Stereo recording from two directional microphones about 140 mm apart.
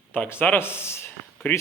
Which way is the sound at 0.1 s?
15° left (ahead or behind).